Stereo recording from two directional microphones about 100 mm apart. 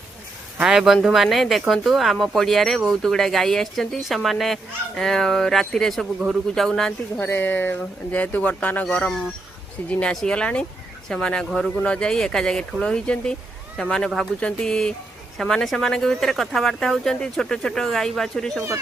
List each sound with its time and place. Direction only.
0.6 s speech: 5° right (ahead or behind)
7.2 s speech: 20° left (ahead or behind)